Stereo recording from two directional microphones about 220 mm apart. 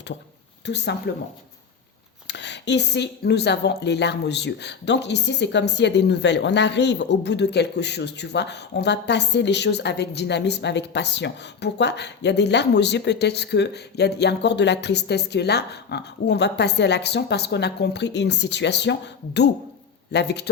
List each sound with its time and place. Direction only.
0.6 s speech: 50° left (ahead or behind)
2.2 s speech: 50° left (ahead or behind)